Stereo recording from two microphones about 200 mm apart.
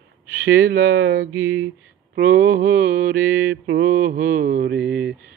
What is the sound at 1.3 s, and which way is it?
Mantra, 10° right (ahead or behind).